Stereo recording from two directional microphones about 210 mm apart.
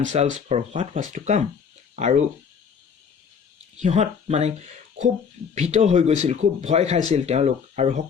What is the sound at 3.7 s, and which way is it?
Speech, 35° right (ahead or behind).